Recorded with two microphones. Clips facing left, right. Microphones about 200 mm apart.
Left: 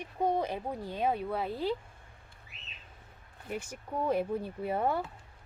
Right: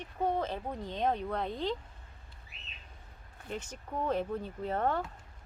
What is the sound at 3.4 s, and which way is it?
Speech, 10° left (ahead or behind).